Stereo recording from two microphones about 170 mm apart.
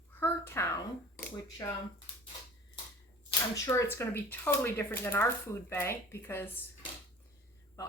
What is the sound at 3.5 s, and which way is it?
Speech, 20° left (ahead or behind).